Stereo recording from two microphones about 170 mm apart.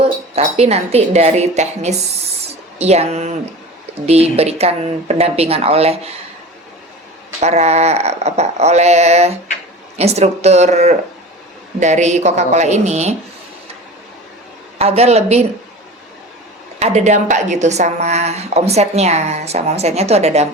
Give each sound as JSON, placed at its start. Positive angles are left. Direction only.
{"t": 0.0, "sound": "a woman's voice", "side_deg": -35}
{"t": 7.3, "sound": "a woman's voice", "side_deg": -40}
{"t": 14.8, "sound": "a woman's voice", "side_deg": -40}
{"t": 16.8, "sound": "a woman's voice", "side_deg": -40}